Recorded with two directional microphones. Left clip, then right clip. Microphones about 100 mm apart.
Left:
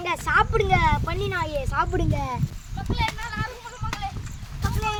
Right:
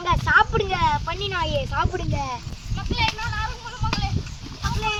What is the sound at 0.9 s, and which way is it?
Speech, 25° left (ahead or behind).